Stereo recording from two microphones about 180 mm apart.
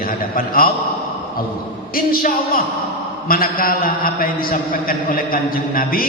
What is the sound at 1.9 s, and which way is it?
A man's voice, 55° left (ahead or behind).